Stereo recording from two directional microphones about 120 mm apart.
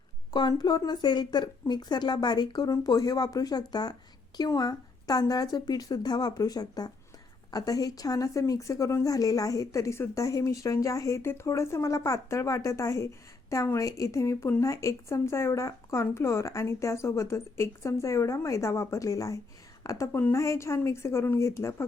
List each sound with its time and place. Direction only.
0.3 s a woman's voice: 35° left (ahead or behind)